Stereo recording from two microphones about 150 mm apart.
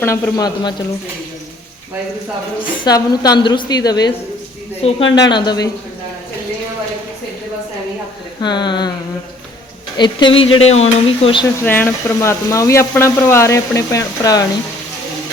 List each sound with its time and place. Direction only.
0.0 s speech: 20° left (ahead or behind)
2.8 s speech: 25° left (ahead or behind)
5.1 s speech: 25° left (ahead or behind)
8.4 s speech: 30° left (ahead or behind)
10.0 s stir: 30° left (ahead or behind)
11.6 s speech: 15° left (ahead or behind)